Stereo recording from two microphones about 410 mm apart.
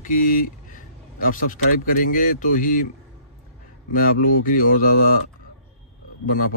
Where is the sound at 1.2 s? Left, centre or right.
Centre.